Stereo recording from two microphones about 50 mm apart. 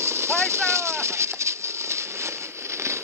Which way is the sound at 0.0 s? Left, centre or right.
Right.